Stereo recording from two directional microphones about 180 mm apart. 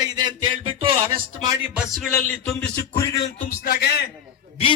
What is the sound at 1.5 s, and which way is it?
Speech, 10° right (ahead or behind).